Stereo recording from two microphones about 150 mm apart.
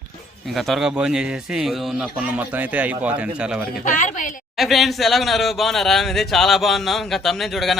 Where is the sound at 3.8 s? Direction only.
60° left (ahead or behind).